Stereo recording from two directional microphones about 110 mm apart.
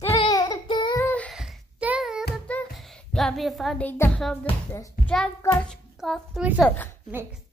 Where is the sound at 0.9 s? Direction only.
15° left (ahead or behind).